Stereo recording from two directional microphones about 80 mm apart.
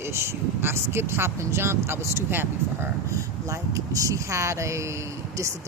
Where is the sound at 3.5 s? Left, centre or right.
Right.